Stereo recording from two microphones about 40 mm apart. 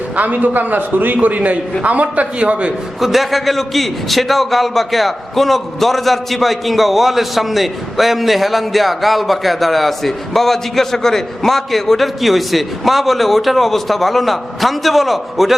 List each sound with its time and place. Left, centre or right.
0.2 s a man's voice: right
3.0 s a man's voice: centre